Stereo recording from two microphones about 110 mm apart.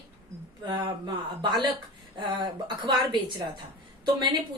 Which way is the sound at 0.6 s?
40° right (ahead or behind).